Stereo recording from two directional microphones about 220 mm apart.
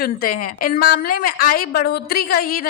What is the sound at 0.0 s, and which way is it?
A woman's voice, 40° left (ahead or behind).